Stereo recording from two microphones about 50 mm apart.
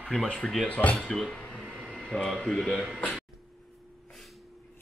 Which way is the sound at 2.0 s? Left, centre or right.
Centre.